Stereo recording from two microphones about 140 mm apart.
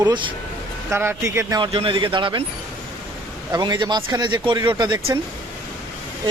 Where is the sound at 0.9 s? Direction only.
15° right (ahead or behind).